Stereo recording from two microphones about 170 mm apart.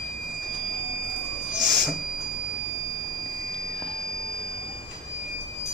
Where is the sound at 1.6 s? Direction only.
Centre (ahead or behind).